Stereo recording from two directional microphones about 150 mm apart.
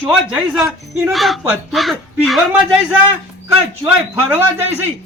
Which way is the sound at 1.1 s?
Centre (ahead or behind).